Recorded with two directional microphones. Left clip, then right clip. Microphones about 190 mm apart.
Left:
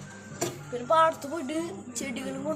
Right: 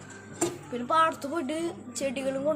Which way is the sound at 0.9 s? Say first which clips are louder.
Left 2 dB; 20° right (ahead or behind).